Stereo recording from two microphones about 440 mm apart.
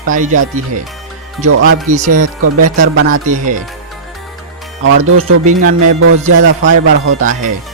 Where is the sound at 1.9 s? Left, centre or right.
Centre.